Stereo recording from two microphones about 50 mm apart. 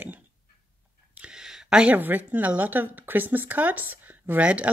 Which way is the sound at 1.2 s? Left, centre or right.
Centre.